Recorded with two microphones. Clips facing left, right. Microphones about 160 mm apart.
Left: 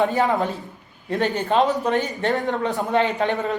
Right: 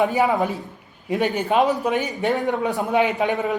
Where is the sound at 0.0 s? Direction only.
15° right (ahead or behind).